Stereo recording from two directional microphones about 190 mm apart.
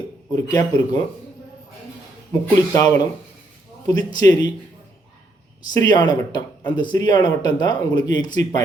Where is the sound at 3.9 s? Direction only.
20° left (ahead or behind).